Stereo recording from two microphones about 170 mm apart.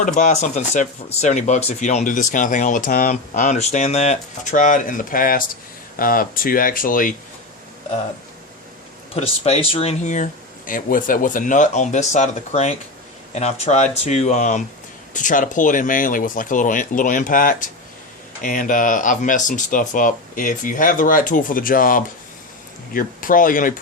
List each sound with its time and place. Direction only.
0.2 s speech: 45° left (ahead or behind)
9.1 s speech: 35° left (ahead or behind); by 23.7 s 55° left (ahead or behind)